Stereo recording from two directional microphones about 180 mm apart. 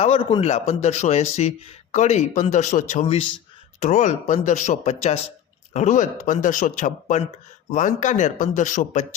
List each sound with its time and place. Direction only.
0.0 s speech: 30° left (ahead or behind)
3.2 s speech: 30° left (ahead or behind)
3.8 s speech: 40° left (ahead or behind)